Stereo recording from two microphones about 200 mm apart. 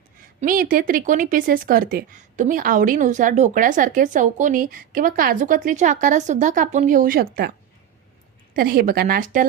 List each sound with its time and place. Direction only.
0.4 s speech: 45° right (ahead or behind)
8.5 s speech: 45° right (ahead or behind)